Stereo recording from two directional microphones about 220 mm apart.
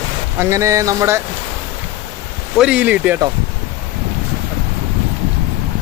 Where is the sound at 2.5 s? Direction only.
5° right (ahead or behind).